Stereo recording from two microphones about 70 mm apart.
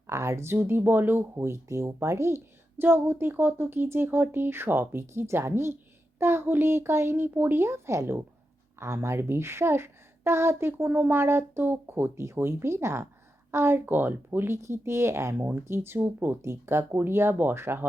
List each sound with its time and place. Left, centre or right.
0.1 s a woman's voice: right
1.6 s a woman's voice: right